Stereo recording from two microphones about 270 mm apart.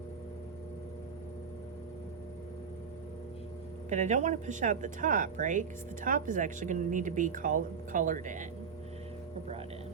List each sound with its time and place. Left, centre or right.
3.8 s speech: right